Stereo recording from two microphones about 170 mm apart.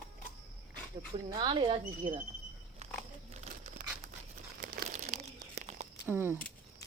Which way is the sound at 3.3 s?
40° right (ahead or behind).